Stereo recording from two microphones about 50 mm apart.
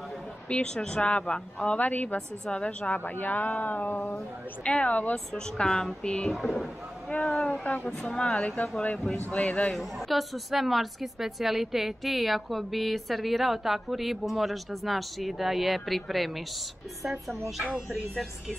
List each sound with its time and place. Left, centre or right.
0.5 s speech: centre
1.8 s speech: left
2.5 s speech: left
2.9 s speech: left
4.6 s speech: left
5.1 s speech: centre
6.3 s a woman's voice: centre
7.1 s speech: centre
7.6 s speech: left
8.0 s speech: centre
9.8 s a woman's voice: centre